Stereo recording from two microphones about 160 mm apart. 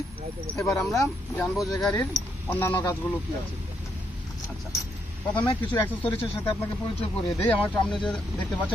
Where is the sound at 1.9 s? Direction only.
20° left (ahead or behind).